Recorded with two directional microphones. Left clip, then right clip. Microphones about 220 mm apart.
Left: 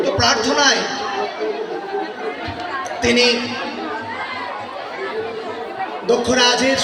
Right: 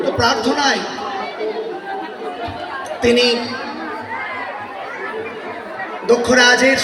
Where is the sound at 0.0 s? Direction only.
15° right (ahead or behind).